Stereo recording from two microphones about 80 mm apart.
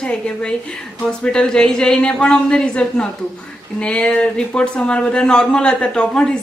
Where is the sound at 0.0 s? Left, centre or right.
Centre.